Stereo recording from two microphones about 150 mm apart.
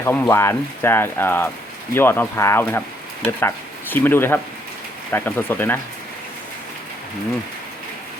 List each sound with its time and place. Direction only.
0.0 s speech: 15° left (ahead or behind)